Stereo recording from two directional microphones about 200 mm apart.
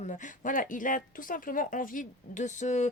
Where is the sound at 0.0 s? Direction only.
40° left (ahead or behind).